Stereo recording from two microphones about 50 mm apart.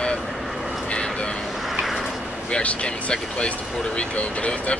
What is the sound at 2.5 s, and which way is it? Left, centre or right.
Speech, left.